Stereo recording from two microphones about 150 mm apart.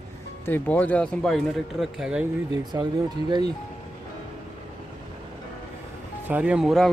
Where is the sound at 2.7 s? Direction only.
20° right (ahead or behind).